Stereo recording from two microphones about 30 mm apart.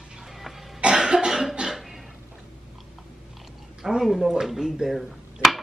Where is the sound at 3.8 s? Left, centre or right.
Right.